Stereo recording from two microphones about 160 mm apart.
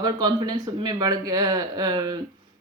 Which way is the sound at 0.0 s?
25° right (ahead or behind).